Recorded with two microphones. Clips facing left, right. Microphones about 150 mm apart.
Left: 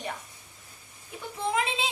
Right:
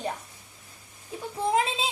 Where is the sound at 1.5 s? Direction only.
35° right (ahead or behind).